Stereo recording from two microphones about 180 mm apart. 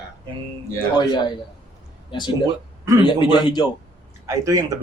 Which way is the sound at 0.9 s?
25° left (ahead or behind).